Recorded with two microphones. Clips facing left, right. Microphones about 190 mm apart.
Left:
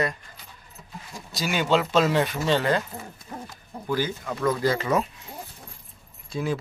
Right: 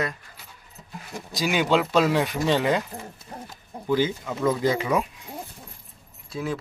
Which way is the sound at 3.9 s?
20° right (ahead or behind).